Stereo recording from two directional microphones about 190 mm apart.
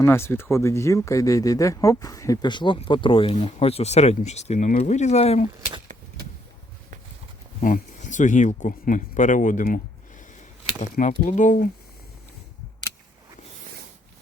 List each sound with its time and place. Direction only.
0.0 s speech: 15° left (ahead or behind); by 5.5 s 35° left (ahead or behind)
7.6 s speech: 40° left (ahead or behind)